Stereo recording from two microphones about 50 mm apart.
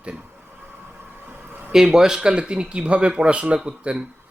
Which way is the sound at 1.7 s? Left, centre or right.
Centre.